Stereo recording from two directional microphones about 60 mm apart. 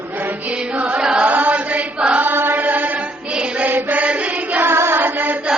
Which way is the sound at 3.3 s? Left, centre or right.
Centre.